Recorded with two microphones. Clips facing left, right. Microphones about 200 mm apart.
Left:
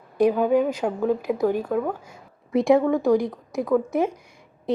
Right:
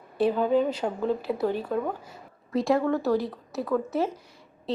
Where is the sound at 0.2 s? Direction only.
10° left (ahead or behind).